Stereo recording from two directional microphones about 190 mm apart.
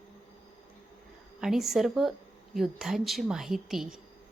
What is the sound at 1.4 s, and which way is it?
A woman's voice, centre (ahead or behind).